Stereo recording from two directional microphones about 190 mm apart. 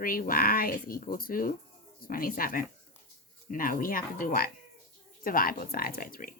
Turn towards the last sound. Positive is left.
turn(degrees=50)  # may be behind; listen again after turning